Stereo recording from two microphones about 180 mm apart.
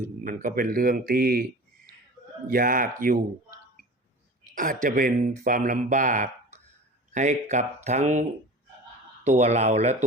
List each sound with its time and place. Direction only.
0.0 s speech: 45° right (ahead or behind)
2.5 s speech: 50° right (ahead or behind)
4.5 s speech: 45° right (ahead or behind)